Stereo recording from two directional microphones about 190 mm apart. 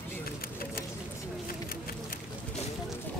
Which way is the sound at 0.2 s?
50° left (ahead or behind).